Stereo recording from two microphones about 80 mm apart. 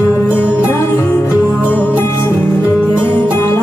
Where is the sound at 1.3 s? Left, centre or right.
Centre.